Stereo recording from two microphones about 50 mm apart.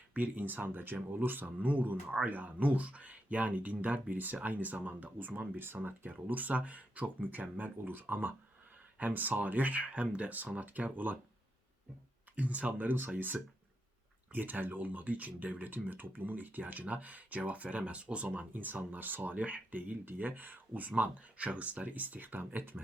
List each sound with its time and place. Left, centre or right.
0.1 s speech: right
12.4 s speech: right